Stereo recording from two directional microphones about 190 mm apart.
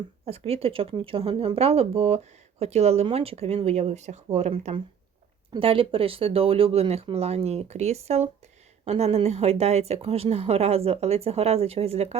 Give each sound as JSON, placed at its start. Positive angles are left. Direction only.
{"t": 0.3, "sound": "speech", "side_deg": -30}